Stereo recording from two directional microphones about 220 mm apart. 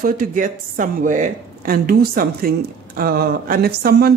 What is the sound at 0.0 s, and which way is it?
Speech, 40° right (ahead or behind).